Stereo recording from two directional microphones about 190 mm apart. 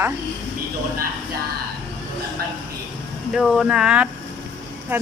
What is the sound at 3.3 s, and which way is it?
Speech, centre (ahead or behind).